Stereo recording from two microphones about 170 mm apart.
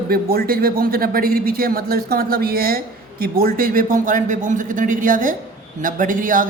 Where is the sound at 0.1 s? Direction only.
65° right (ahead or behind).